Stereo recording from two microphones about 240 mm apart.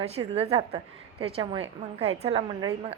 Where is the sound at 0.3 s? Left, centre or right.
Right.